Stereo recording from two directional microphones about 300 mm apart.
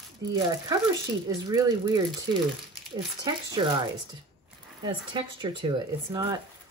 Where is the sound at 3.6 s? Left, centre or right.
Centre.